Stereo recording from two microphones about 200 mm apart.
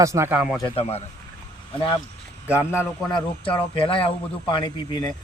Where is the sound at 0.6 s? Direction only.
30° left (ahead or behind).